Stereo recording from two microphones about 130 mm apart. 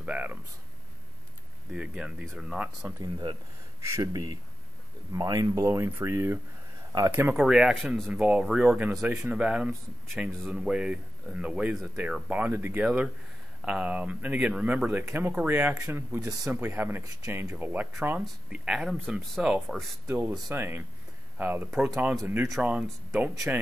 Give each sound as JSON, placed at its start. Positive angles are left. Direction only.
{"t": 0.0, "sound": "a sound", "side_deg": -10}
{"t": 1.7, "sound": "speech", "side_deg": -5}
{"t": 3.0, "sound": "speech", "side_deg": -35}
{"t": 3.8, "sound": "speech", "side_deg": -25}
{"t": 22.2, "sound": "speech", "side_deg": -20}